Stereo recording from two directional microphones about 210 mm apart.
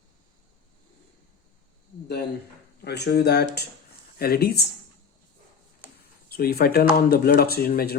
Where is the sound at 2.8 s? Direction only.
50° left (ahead or behind).